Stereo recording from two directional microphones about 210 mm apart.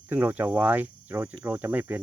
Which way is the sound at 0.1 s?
10° right (ahead or behind).